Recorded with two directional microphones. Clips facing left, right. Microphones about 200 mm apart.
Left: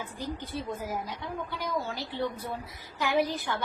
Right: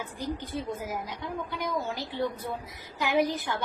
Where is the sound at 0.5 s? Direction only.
15° right (ahead or behind).